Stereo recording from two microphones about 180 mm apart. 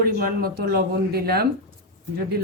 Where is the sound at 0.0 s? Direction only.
55° right (ahead or behind).